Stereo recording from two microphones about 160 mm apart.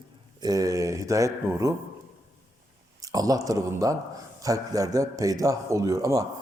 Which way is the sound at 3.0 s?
20° right (ahead or behind).